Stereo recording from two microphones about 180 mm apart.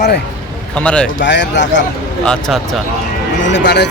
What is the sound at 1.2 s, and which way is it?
Speech, 80° left.